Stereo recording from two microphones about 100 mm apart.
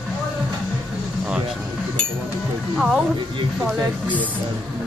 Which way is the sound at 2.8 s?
5° right (ahead or behind).